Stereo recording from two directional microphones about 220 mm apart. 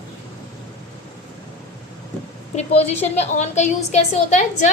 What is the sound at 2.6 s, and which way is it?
A woman's voice, 30° left (ahead or behind).